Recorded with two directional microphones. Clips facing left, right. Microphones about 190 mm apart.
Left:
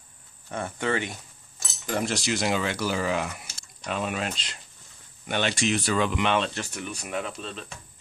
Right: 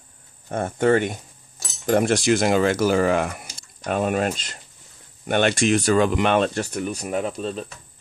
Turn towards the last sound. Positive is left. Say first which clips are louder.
# right 7 dB
turn(degrees=-40)  # may be behind; listen again after turning